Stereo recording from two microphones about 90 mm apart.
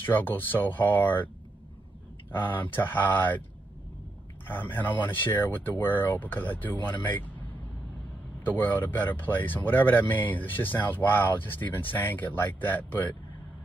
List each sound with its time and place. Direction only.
0.0 s speech: 20° left (ahead or behind)
2.3 s speech: 20° left (ahead or behind)
4.5 s speech: 20° left (ahead or behind)
8.5 s speech: 20° left (ahead or behind)